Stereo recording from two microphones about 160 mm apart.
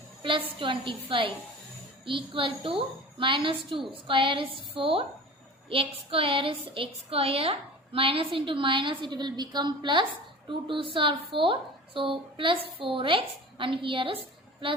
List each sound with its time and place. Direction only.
0.2 s a woman's voice: 30° right (ahead or behind)